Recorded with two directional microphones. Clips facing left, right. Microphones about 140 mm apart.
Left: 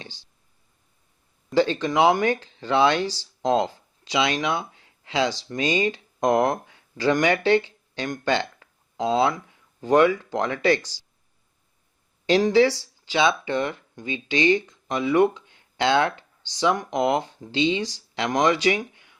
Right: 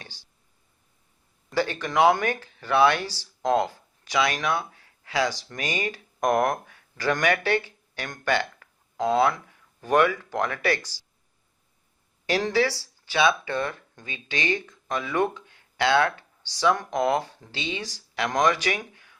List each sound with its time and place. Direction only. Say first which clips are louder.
0.0 s speech: left 4 dB; 20° left (ahead or behind)
1.5 s speech: left 3 dB; 20° left (ahead or behind)
12.2 s speech: left 6 dB; 20° left (ahead or behind)